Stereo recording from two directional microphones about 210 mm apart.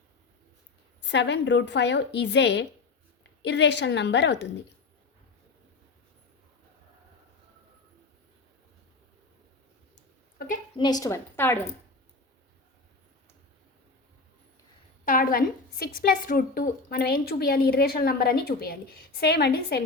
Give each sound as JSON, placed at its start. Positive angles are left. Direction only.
{"t": 1.0, "sound": "a woman's voice", "side_deg": 55}
{"t": 10.3, "sound": "a sound", "side_deg": 40}
{"t": 10.8, "sound": "a woman's voice", "side_deg": 20}
{"t": 15.0, "sound": "a woman's voice", "side_deg": 40}